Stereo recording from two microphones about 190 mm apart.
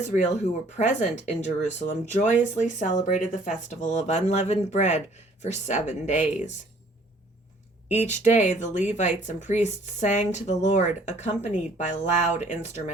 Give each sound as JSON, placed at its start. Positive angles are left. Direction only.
{"t": 0.0, "sound": "speech", "side_deg": 40}
{"t": 7.9, "sound": "speech", "side_deg": 35}